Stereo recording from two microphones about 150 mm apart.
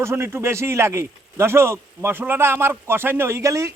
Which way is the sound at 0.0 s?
15° right (ahead or behind).